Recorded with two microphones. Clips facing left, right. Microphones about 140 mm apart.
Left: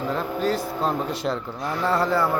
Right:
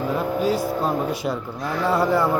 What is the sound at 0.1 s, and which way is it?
Speech, 5° right (ahead or behind).